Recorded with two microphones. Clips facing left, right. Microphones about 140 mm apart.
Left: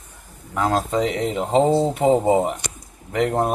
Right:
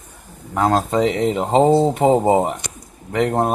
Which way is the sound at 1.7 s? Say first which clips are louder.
Right 4 dB; 25° right (ahead or behind).